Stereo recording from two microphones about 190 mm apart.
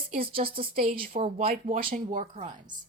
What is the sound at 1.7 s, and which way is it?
Speech, 45° right (ahead or behind).